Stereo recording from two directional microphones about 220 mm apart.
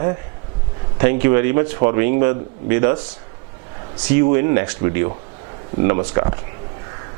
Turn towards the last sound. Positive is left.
turn(degrees=-20)  # may be behind; listen again after turning